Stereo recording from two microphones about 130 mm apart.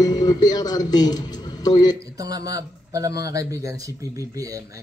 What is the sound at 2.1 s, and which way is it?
Speech, 30° right (ahead or behind).